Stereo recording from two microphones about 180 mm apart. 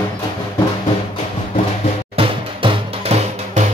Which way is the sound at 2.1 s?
35° right (ahead or behind).